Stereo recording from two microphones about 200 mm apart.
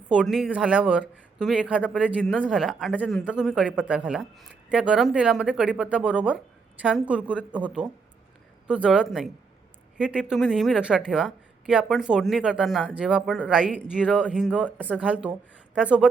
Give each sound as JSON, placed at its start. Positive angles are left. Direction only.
{"t": 0.1, "sound": "speech", "side_deg": -5}
{"t": 14.0, "sound": "speech", "side_deg": 5}
{"t": 14.3, "sound": "speech", "side_deg": -5}